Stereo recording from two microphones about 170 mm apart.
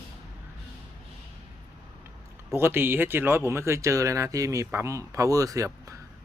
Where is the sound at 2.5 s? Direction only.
15° right (ahead or behind).